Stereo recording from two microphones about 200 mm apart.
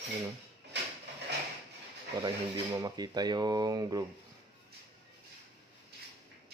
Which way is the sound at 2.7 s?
20° right (ahead or behind).